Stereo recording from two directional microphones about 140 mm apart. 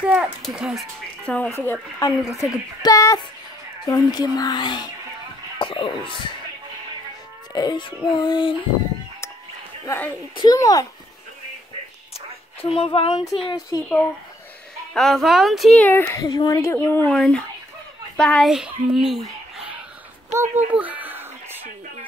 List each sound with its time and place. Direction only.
0.0 s a woman's voice: 10° right (ahead or behind)
1.2 s speech: 10° left (ahead or behind); by 4.8 s 30° left (ahead or behind)
5.6 s a sound: 35° left (ahead or behind)
7.5 s a sound: 30° left (ahead or behind)
9.8 s speech: 15° left (ahead or behind)
10.3 s speech: 30° left (ahead or behind)
12.6 s a sound: 40° left (ahead or behind)
13.7 s speech: 25° left (ahead or behind)
15.0 s a woman's voice: centre (ahead or behind)
15.8 s speech: 10° left (ahead or behind)
16.2 s a child's voice: 25° left (ahead or behind); by 19.8 s 5° right (ahead or behind)
20.3 s a sound: 10° right (ahead or behind)